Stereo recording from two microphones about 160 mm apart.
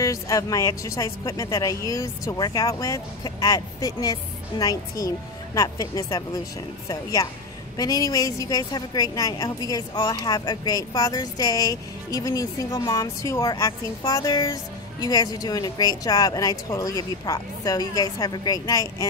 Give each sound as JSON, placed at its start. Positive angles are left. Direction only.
{"t": 0.0, "sound": "a woman's voice", "side_deg": 20}